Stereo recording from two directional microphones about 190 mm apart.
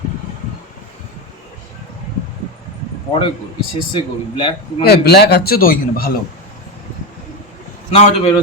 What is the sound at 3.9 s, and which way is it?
Speech, 25° left (ahead or behind).